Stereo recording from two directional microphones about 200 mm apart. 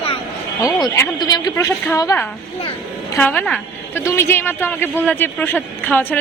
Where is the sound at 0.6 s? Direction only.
20° left (ahead or behind).